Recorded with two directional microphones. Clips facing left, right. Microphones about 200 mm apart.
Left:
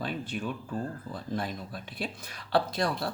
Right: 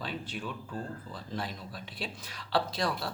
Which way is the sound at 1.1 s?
50° left (ahead or behind).